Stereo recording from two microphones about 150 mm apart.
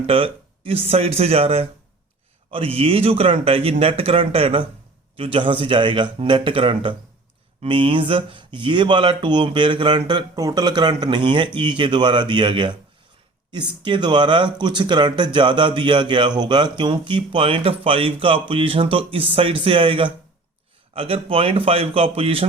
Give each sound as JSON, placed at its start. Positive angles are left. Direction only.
{"t": 0.1, "sound": "speech", "side_deg": -40}